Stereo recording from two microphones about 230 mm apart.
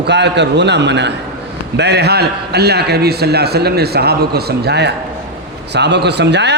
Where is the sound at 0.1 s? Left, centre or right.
Right.